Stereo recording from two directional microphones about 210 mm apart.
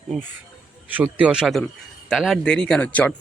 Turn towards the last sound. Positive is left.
turn(degrees=5)  # may be behind; listen again after turning